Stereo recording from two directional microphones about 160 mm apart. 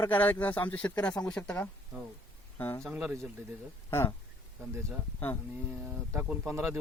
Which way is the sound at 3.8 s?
15° left (ahead or behind).